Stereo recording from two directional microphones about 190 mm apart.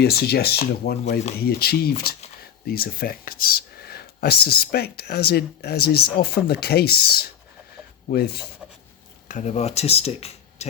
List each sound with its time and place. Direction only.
0.0 s speech: 55° left (ahead or behind)
9.3 s speech: 40° left (ahead or behind)